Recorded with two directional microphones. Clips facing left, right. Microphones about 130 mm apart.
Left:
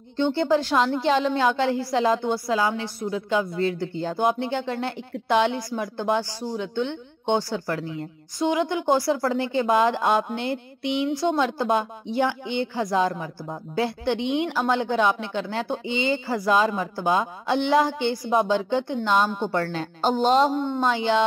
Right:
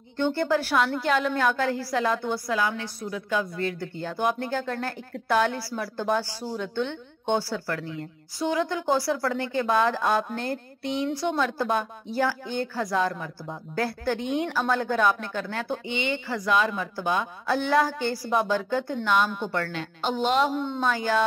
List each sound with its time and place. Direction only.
0.4 s a woman's voice: 20° left (ahead or behind)
20.6 s a woman's voice: 20° left (ahead or behind)